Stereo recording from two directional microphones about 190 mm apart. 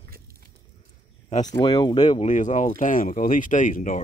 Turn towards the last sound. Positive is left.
turn(degrees=45)  # may be behind; listen again after turning